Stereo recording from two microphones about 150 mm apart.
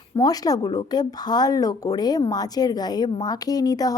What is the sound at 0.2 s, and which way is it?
A woman's voice, 25° left (ahead or behind).